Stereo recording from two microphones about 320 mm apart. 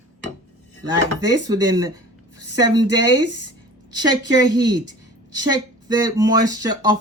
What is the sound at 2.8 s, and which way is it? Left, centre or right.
Speech, left.